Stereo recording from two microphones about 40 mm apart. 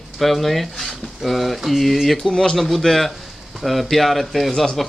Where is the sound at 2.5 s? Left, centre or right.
Centre.